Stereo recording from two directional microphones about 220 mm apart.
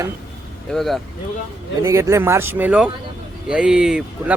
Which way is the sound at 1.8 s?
15° right (ahead or behind).